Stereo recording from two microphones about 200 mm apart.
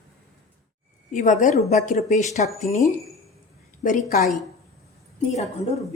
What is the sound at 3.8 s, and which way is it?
Speech, 40° left (ahead or behind).